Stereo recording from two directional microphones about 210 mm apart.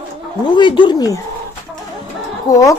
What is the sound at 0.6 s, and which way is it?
Speech, 20° left (ahead or behind).